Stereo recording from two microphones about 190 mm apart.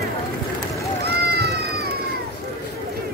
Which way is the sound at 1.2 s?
55° right (ahead or behind).